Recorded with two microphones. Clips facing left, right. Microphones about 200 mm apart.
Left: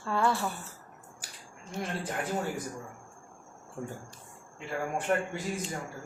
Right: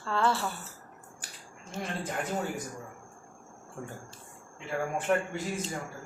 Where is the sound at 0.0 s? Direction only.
15° left (ahead or behind).